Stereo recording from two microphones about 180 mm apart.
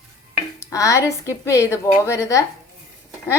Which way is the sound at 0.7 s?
20° left (ahead or behind).